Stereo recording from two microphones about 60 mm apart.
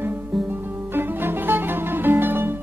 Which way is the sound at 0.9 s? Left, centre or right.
Right.